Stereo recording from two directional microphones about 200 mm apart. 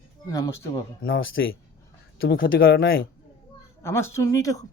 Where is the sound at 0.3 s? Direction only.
15° left (ahead or behind).